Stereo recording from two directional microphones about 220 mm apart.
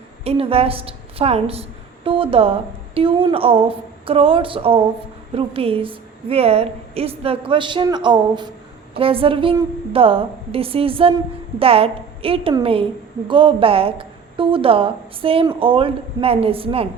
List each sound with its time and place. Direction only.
0.3 s a woman's voice: 25° right (ahead or behind)